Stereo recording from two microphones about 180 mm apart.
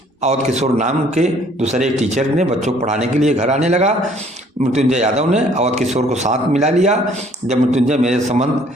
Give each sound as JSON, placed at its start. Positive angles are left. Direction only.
{"t": 0.2, "sound": "a man's voice", "side_deg": -40}